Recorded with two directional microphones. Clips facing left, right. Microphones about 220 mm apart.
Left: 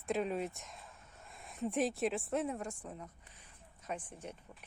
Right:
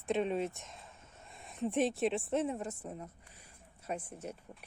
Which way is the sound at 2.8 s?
30° right (ahead or behind).